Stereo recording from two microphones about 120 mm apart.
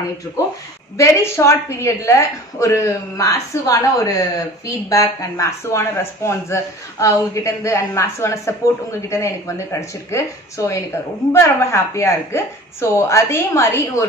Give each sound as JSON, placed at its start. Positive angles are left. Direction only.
{"t": 0.9, "sound": "speech", "side_deg": 25}